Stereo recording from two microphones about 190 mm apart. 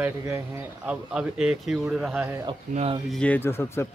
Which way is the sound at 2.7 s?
35° right (ahead or behind).